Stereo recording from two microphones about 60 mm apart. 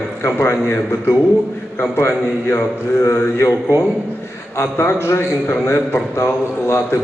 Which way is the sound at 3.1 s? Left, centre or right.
Left.